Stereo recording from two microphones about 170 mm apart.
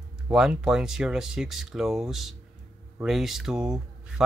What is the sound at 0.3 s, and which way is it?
Speech, 5° right (ahead or behind).